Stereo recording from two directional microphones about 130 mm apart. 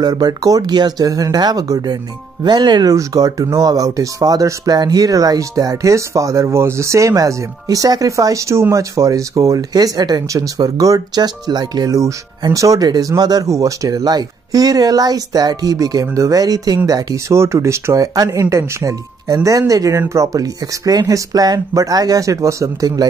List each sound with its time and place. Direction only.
0.0 s speech: 30° right (ahead or behind)